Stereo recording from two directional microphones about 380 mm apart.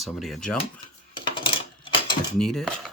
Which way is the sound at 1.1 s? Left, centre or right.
Centre.